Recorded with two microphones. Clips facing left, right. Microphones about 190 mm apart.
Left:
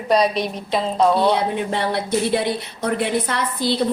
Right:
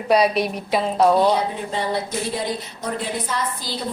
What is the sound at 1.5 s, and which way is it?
A woman's voice, 65° left (ahead or behind).